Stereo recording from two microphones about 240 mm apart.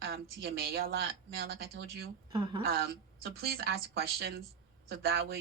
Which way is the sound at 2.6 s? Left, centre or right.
Right.